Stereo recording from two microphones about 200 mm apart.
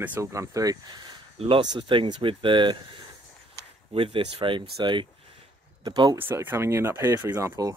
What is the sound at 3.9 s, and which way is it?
Speech, 25° right (ahead or behind).